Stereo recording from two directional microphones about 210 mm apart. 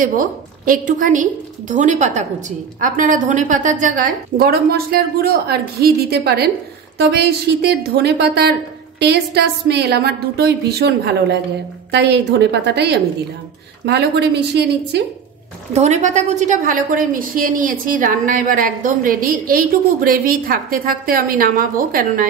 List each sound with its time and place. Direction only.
0.0 s a woman's voice: 40° right (ahead or behind)
15.7 s a woman's voice: 35° right (ahead or behind)